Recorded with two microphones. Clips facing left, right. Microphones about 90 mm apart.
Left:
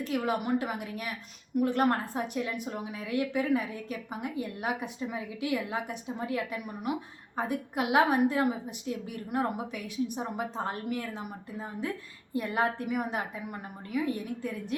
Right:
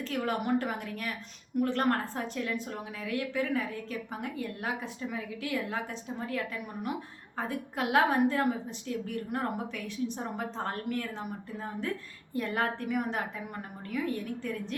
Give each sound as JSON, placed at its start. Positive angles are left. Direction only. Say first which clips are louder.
{"t": 0.0, "sound": "a woman's voice", "louder": "left 2 dB", "side_deg": 10}